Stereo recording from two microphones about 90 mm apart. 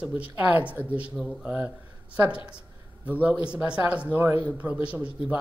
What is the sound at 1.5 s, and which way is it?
Speech, 15° right (ahead or behind).